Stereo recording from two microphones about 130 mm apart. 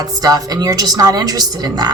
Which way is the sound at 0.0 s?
30° right (ahead or behind).